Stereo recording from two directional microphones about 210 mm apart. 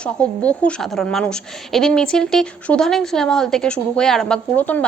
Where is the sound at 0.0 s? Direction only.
5° left (ahead or behind).